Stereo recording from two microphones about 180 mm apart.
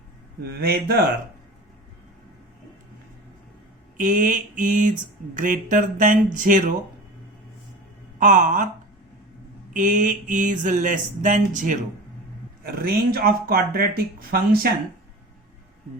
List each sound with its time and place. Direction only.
0.5 s speech: 60° right (ahead or behind)
3.9 s speech: 45° right (ahead or behind)
8.2 s speech: 45° right (ahead or behind)
9.7 s speech: 45° right (ahead or behind)
12.6 s speech: 55° right (ahead or behind)